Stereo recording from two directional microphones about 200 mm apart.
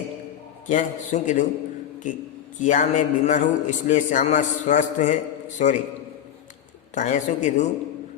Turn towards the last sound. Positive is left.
turn(degrees=35)  # may be behind; listen again after turning